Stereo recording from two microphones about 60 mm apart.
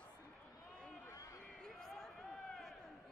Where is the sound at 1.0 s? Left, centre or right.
Left.